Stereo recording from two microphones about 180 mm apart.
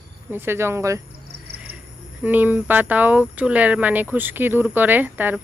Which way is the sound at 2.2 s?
10° right (ahead or behind).